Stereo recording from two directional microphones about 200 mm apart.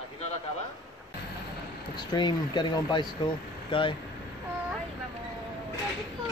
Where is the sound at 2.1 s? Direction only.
25° left (ahead or behind).